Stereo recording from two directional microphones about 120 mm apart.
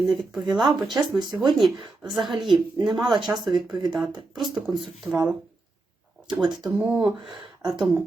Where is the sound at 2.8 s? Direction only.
35° right (ahead or behind).